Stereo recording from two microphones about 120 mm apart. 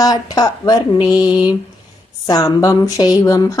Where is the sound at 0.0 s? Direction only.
30° left (ahead or behind).